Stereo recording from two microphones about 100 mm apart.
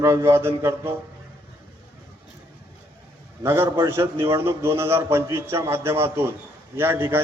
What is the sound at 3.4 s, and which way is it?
A man's voice, 25° right (ahead or behind).